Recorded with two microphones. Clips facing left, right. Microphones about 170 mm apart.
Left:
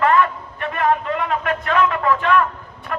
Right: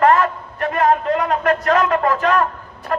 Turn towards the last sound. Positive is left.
turn(degrees=-40)  # may be behind; listen again after turning